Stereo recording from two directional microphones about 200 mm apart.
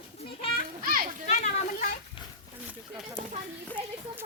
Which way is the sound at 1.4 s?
35° left (ahead or behind).